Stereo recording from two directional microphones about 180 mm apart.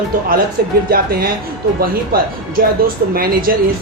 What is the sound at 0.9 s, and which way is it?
Speech, 55° right (ahead or behind).